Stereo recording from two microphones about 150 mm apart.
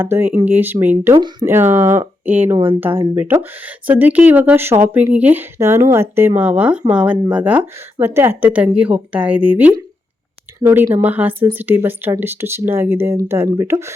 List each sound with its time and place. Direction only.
0.0 s speech: 15° right (ahead or behind)
1.1 s speech: 30° right (ahead or behind)
1.5 s speech: 15° right (ahead or behind)